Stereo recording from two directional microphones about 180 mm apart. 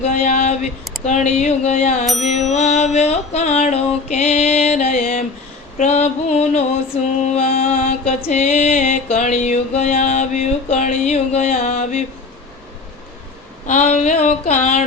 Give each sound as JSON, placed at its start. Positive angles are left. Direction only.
{"t": 0.0, "sound": "music", "side_deg": 40}
{"t": 7.6, "sound": "mantra", "side_deg": 50}
{"t": 8.4, "sound": "music", "side_deg": 35}
{"t": 13.7, "sound": "music", "side_deg": 40}